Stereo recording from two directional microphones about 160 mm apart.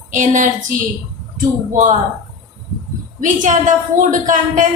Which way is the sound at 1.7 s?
55° right (ahead or behind).